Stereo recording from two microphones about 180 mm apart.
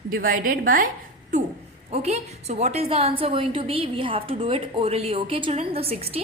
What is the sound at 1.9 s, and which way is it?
A woman's voice, 35° right (ahead or behind).